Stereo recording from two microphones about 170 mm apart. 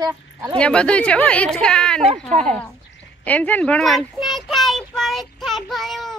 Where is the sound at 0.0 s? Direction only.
25° right (ahead or behind).